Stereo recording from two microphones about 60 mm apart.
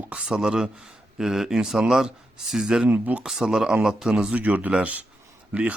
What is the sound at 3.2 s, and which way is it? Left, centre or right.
Speech, centre.